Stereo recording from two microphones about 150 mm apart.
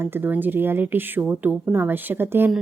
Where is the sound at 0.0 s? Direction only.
15° right (ahead or behind).